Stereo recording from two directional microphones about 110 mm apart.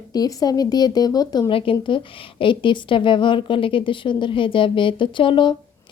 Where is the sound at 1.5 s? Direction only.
55° left (ahead or behind).